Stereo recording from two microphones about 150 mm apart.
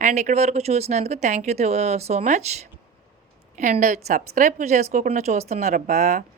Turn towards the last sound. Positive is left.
turn(degrees=-55)  # may be behind; listen again after turning